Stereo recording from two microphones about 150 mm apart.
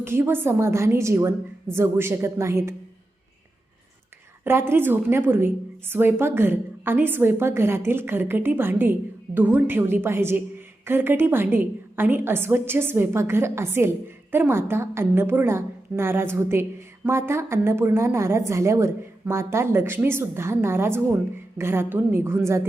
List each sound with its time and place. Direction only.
0.0 s a woman's voice: 15° right (ahead or behind)
4.4 s a woman's voice: 15° right (ahead or behind)